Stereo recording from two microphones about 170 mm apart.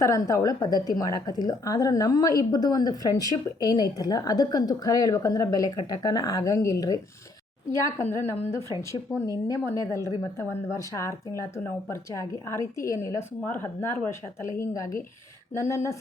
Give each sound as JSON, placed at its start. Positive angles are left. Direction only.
{"t": 0.0, "sound": "a woman's voice", "side_deg": 20}